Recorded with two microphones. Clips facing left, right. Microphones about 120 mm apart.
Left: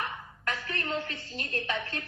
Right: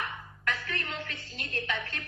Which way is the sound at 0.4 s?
40° left (ahead or behind).